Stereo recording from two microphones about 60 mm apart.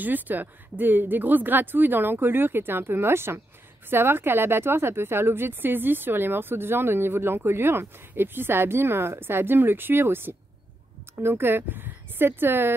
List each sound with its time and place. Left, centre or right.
0.0 s speech: right